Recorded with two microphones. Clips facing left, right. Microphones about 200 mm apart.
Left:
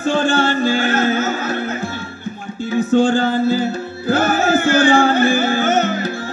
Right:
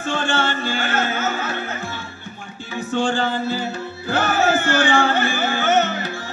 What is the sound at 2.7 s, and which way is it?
Music, 40° left (ahead or behind).